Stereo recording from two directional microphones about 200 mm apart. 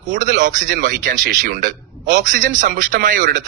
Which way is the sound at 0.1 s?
40° right (ahead or behind).